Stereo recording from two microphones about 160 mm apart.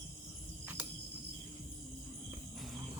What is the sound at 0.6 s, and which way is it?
Cricket, 10° right (ahead or behind).